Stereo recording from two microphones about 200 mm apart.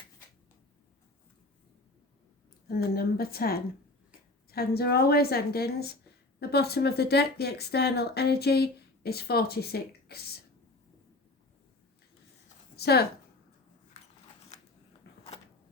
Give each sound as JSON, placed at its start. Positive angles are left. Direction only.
{"t": 2.6, "sound": "speech", "side_deg": 50}
{"t": 12.7, "sound": "speech", "side_deg": 55}
{"t": 15.1, "sound": "a sound", "side_deg": 55}